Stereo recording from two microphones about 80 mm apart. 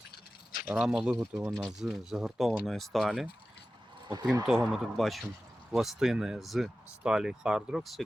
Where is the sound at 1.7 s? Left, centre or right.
Centre.